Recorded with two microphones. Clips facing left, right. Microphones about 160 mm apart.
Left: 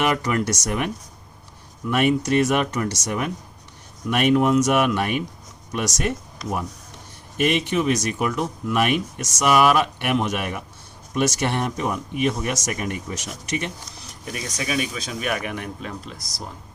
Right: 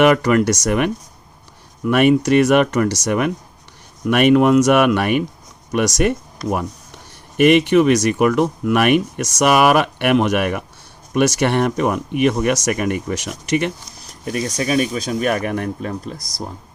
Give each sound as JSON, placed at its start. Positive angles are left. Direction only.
{"t": 0.0, "sound": "speech", "side_deg": -80}
{"t": 14.3, "sound": "speech", "side_deg": -40}